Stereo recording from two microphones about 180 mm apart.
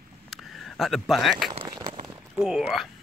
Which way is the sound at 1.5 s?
30° right (ahead or behind).